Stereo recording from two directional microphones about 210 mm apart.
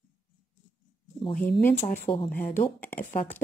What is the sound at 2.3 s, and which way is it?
Speech, 40° left (ahead or behind).